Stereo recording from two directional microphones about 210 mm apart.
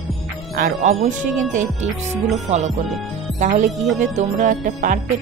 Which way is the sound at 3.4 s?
35° right (ahead or behind).